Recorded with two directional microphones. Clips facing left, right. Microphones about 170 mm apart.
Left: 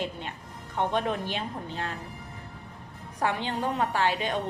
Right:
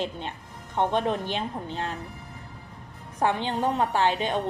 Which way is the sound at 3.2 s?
20° right (ahead or behind).